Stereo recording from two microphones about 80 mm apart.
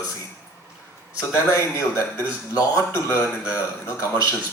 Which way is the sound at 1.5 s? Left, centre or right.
Left.